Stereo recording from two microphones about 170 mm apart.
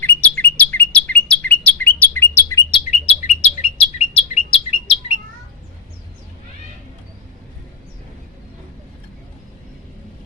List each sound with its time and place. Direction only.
0.0 s bird: 10° left (ahead or behind)
2.9 s chirp: 40° left (ahead or behind)